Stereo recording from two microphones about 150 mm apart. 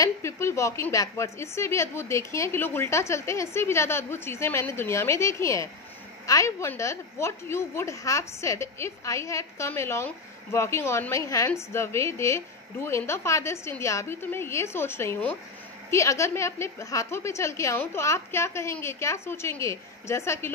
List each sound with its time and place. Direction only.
0.0 s a woman's voice: 20° left (ahead or behind)